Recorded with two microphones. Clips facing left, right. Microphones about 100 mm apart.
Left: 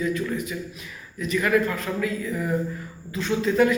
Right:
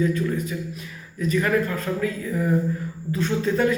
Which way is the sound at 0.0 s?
35° right (ahead or behind).